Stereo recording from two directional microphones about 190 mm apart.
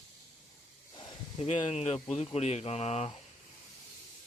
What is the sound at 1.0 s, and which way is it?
Speech, 30° left (ahead or behind).